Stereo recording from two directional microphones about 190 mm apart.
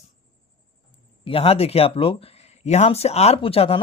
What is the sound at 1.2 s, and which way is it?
Speech, 30° left (ahead or behind).